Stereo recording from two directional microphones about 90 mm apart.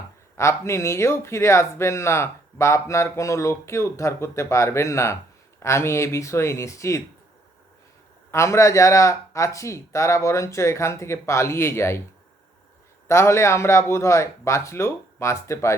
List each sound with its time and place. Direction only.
0.3 s speech: 30° left (ahead or behind)
8.3 s speech: 30° left (ahead or behind)
13.1 s speech: 30° left (ahead or behind)